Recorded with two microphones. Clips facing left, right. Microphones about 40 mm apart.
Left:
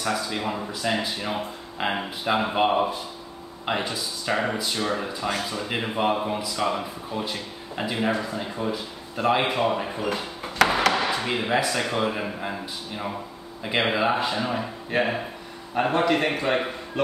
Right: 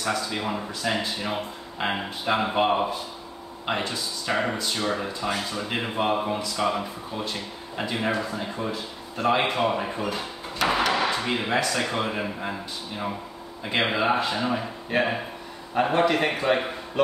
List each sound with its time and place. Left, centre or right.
0.0 s speech: centre
10.6 s a sound: left
11.0 s speech: centre